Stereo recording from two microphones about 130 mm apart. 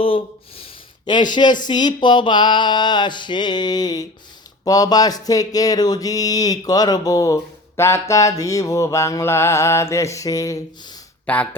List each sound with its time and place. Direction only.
0.0 s speech: 45° left (ahead or behind)
1.6 s a sound: 35° left (ahead or behind)
4.6 s mantra: 30° left (ahead or behind)
11.3 s speech: 10° left (ahead or behind)